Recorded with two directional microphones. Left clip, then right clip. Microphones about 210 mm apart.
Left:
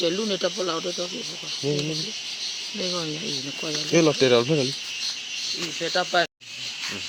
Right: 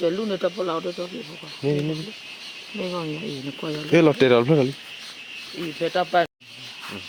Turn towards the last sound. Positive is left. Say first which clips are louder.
# right 2 dB
turn(degrees=-40)  # may be behind; listen again after turning